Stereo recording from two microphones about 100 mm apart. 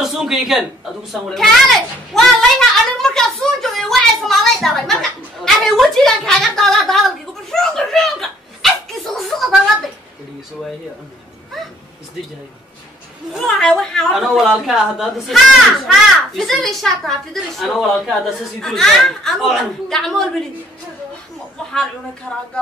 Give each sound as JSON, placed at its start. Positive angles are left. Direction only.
{"t": 0.0, "sound": "a woman's voice", "side_deg": -5}
{"t": 7.5, "sound": "a sound", "side_deg": 5}
{"t": 13.6, "sound": "speech", "side_deg": 5}
{"t": 22.3, "sound": "speech", "side_deg": 10}